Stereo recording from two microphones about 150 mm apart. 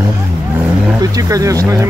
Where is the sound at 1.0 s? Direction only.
25° right (ahead or behind).